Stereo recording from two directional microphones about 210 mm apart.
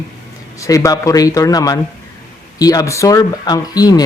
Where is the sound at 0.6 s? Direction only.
15° left (ahead or behind).